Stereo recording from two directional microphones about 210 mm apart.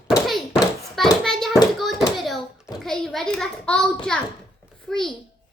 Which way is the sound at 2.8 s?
Centre (ahead or behind).